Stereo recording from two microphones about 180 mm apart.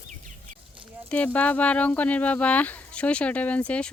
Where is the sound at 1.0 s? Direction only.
5° left (ahead or behind).